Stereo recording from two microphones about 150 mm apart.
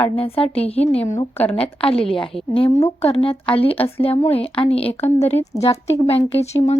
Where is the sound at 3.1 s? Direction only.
40° left (ahead or behind).